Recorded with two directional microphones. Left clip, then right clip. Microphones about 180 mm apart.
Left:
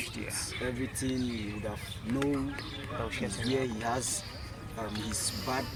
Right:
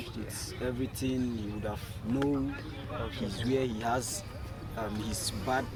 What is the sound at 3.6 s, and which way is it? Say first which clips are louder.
Speech: right 1 dB; 25° right (ahead or behind).